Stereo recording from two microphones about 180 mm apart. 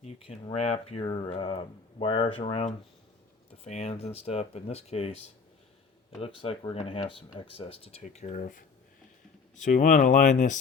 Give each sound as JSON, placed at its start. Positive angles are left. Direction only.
{"t": 0.0, "sound": "speech", "side_deg": 35}